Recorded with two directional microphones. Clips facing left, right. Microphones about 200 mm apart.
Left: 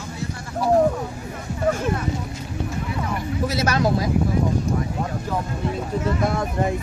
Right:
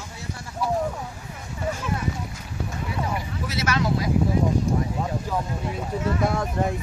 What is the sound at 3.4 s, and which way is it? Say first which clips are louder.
Speech: left 4 dB; 40° left (ahead or behind).